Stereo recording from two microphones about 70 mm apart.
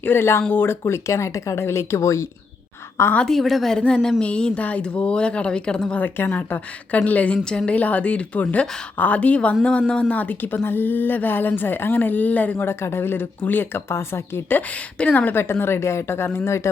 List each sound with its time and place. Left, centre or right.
0.0 s speech: left
3.2 s speech: centre; by 12.6 s left
12.6 s speech: left
14.9 s speech: left